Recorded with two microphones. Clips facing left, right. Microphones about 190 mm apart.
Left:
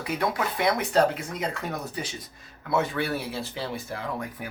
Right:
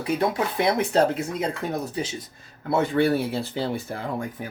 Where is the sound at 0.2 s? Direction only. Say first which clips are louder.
Right 3 dB; 25° right (ahead or behind).